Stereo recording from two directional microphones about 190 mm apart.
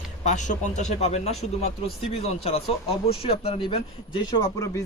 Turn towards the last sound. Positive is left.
turn(degrees=20)  # may be behind; listen again after turning